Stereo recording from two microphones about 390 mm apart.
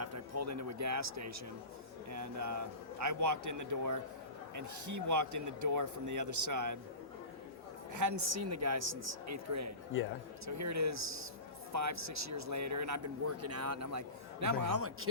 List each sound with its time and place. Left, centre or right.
0.0 s speech: right
7.9 s speech: right